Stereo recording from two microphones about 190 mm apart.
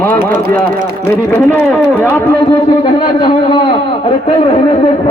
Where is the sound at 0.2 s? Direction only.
45° right (ahead or behind).